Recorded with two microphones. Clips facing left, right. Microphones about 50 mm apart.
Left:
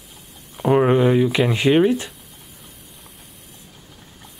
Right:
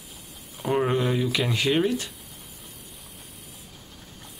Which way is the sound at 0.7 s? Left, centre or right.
Left.